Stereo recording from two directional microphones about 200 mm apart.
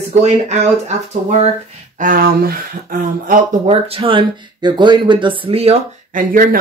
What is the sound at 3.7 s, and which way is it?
Speech, 30° right (ahead or behind).